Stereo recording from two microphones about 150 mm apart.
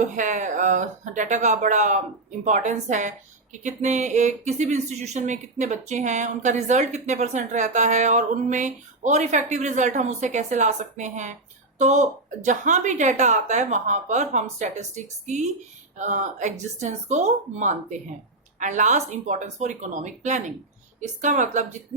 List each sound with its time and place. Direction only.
0.0 s speech: 55° right (ahead or behind)